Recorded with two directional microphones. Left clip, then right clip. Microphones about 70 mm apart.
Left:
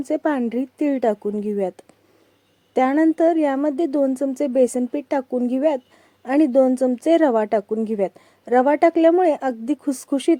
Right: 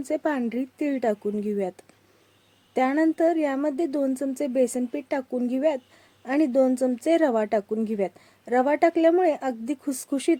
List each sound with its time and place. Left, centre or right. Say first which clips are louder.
0.0 s a woman's voice: left 5 dB; left